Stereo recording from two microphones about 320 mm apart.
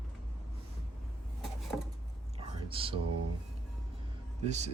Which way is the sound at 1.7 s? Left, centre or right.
Centre.